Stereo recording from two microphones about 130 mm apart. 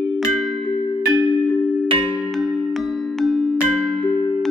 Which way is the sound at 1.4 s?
5° left (ahead or behind).